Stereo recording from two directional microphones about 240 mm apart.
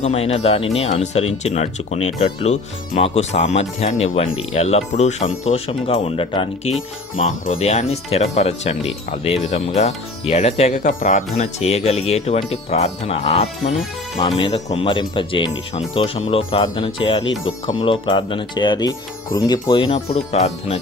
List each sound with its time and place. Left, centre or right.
0.0 s speech: left